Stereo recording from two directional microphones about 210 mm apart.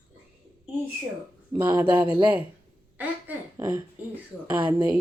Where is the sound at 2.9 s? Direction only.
10° right (ahead or behind).